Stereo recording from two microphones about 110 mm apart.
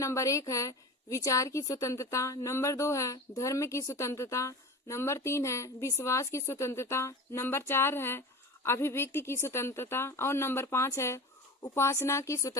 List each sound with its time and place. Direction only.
0.0 s a woman's voice: 30° left (ahead or behind)